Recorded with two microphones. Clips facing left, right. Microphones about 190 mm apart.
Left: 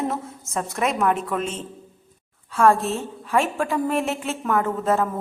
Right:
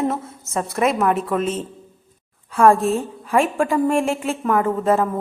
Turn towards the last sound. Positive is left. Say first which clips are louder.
# right 3 dB
turn(degrees=-10)  # may be behind; listen again after turning